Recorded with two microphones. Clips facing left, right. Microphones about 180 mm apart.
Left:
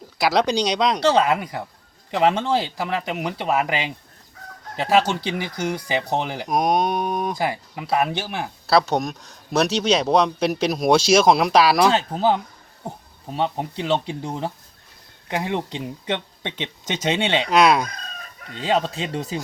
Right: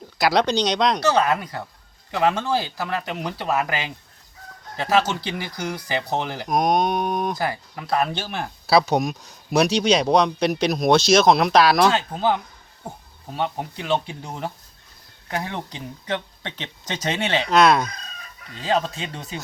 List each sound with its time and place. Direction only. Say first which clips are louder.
0.2 s speech: even; centre (ahead or behind)
1.3 s speech: left 1 dB; 15° left (ahead or behind)
7.4 s speech: left 2 dB; 20° left (ahead or behind)
8.6 s speech: right 1 dB; centre (ahead or behind)
11.9 s speech: left 2 dB; 30° left (ahead or behind)
17.5 s speech: even; 10° left (ahead or behind)
18.5 s speech: left 1 dB; 30° left (ahead or behind)